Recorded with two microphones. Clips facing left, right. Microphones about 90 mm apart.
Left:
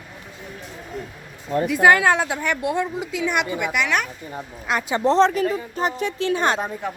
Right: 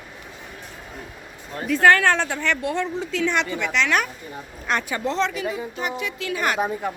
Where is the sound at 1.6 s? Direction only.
15° left (ahead or behind).